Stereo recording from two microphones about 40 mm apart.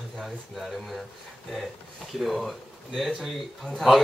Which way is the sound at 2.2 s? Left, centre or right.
Centre.